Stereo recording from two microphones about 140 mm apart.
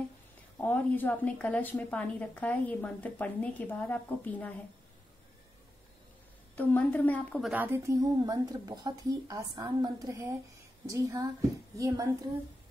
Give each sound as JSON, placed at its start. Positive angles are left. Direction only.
{"t": 0.6, "sound": "a woman's voice", "side_deg": 10}
{"t": 6.5, "sound": "a woman's voice", "side_deg": 10}
{"t": 7.5, "sound": "a woman's voice", "side_deg": -15}